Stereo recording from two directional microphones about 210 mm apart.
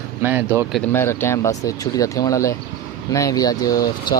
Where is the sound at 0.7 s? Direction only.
10° left (ahead or behind).